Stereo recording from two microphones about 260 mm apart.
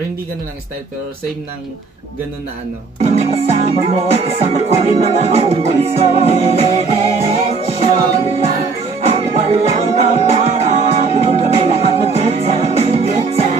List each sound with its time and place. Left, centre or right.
3.0 s music: right